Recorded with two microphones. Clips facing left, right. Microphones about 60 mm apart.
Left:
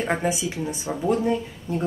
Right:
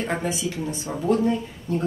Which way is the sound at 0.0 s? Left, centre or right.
Centre.